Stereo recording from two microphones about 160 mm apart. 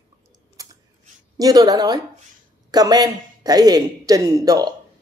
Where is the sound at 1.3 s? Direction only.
25° right (ahead or behind).